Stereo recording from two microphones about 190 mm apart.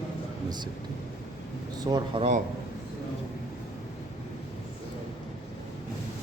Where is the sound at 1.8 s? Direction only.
20° right (ahead or behind).